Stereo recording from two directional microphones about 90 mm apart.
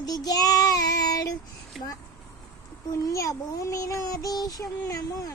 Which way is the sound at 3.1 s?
35° left (ahead or behind).